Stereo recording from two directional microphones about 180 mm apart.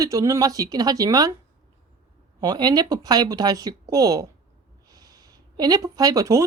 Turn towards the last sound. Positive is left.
turn(degrees=-20)  # may be behind; listen again after turning